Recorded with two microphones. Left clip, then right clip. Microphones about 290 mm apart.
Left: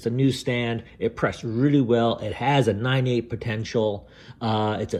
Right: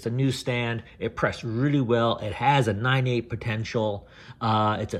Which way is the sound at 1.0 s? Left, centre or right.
Centre.